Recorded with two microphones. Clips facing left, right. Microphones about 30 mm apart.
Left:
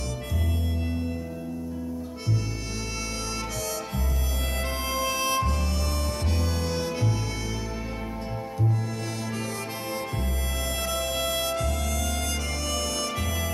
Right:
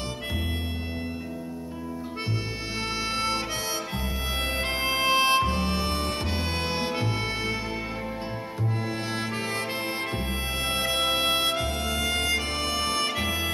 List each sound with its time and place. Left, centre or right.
2.2 s harmonica: right
8.5 s music: right